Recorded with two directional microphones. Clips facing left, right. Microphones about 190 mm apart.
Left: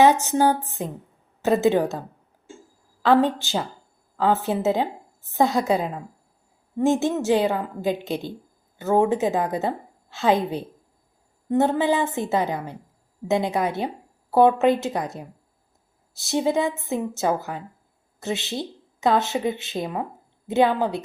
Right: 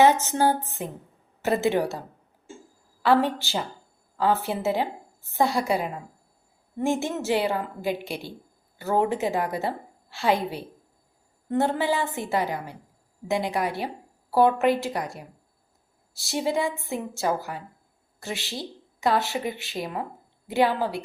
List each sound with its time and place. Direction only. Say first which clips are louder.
0.0 s a woman's voice: left 2 dB; 15° left (ahead or behind)
3.1 s a woman's voice: left 3 dB; 20° left (ahead or behind)